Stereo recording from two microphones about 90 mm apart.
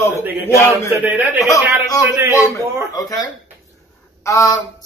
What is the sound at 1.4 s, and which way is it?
A man's voice, 35° left (ahead or behind).